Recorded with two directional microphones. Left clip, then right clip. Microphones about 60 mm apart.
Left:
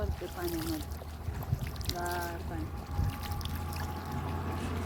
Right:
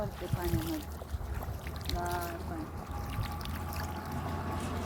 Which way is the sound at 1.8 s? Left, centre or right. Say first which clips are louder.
Even; left.